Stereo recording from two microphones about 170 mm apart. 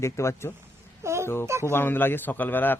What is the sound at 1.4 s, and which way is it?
Speech, 15° right (ahead or behind).